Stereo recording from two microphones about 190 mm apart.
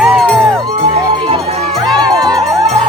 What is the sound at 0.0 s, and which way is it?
Music, centre (ahead or behind).